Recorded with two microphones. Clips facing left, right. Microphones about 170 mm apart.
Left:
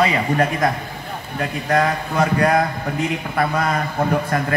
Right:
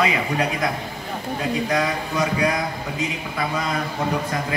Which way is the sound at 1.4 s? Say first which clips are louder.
Left 3 dB; 55° left (ahead or behind).